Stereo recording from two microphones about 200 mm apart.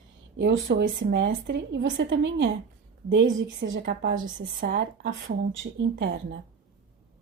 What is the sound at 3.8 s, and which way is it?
Speech, 50° right (ahead or behind).